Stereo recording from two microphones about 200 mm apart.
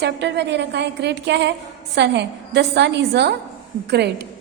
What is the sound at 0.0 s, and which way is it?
A woman's voice, 60° right (ahead or behind).